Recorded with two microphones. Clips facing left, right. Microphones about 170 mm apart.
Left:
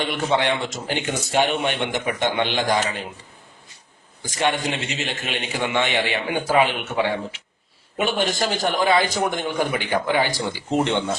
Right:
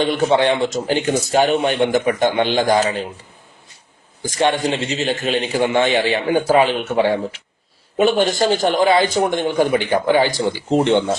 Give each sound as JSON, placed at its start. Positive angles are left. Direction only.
{"t": 0.0, "sound": "a man's voice", "side_deg": -35}
{"t": 4.2, "sound": "a man's voice", "side_deg": -35}
{"t": 8.6, "sound": "a man's voice", "side_deg": -25}